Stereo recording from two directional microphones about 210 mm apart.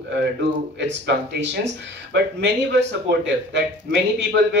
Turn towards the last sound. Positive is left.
turn(degrees=-55)  # may be behind; listen again after turning